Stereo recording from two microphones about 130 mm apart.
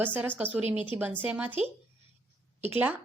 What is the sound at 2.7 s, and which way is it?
Speech, 10° right (ahead or behind).